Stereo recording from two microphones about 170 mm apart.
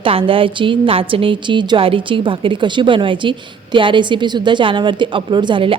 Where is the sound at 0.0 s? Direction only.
30° right (ahead or behind).